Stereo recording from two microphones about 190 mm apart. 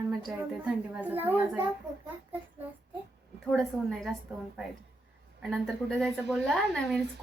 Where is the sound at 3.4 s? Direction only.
Centre (ahead or behind).